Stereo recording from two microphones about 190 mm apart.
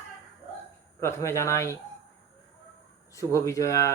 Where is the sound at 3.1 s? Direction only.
15° left (ahead or behind).